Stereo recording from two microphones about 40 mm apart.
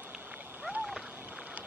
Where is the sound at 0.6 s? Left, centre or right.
Right.